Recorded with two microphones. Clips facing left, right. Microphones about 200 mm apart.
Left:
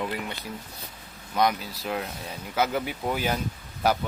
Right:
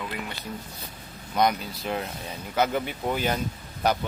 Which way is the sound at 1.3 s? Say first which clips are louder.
Right 1 dB; centre (ahead or behind).